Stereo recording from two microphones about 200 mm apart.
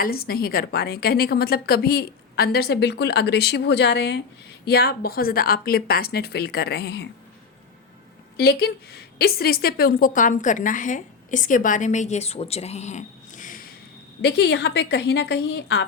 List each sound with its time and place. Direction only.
0.0 s a woman's voice: 50° left (ahead or behind)
8.4 s a woman's voice: 50° left (ahead or behind)
14.2 s a woman's voice: 55° left (ahead or behind)